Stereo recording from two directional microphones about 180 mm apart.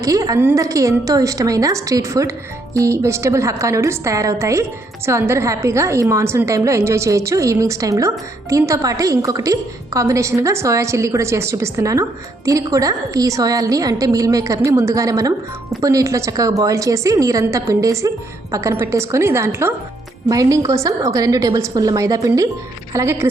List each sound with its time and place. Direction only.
0.0 s a woman's voice: 20° right (ahead or behind)